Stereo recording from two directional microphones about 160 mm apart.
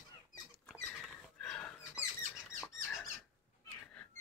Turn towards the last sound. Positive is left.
turn(degrees=0)  # may be behind; listen again after turning